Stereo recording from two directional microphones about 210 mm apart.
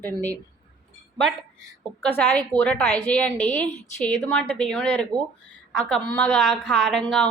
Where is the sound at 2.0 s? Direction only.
10° left (ahead or behind).